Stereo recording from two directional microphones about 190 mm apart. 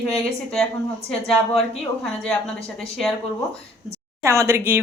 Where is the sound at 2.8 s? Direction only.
5° left (ahead or behind).